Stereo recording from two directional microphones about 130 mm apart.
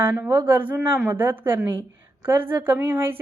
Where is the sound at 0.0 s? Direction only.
20° right (ahead or behind).